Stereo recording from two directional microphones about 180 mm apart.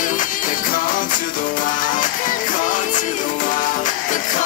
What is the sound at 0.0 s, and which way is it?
Music, 45° left (ahead or behind).